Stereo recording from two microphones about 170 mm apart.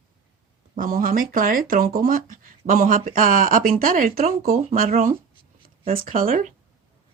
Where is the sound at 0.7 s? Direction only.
55° right (ahead or behind).